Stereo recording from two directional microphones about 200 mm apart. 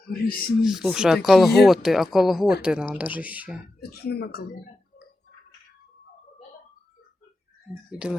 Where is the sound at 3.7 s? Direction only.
50° left (ahead or behind).